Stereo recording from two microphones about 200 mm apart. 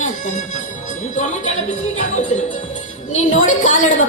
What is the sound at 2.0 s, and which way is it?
Music, 35° left (ahead or behind).